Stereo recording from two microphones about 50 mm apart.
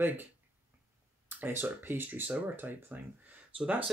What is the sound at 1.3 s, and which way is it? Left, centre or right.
Speech, right.